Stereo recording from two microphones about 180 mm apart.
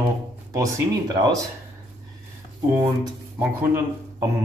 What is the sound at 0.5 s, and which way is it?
Speech, 20° right (ahead or behind).